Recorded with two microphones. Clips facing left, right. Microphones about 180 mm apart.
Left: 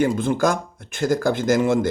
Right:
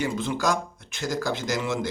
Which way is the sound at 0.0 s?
50° left (ahead or behind).